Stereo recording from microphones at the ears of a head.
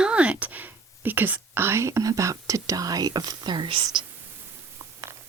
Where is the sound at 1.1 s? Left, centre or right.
Right.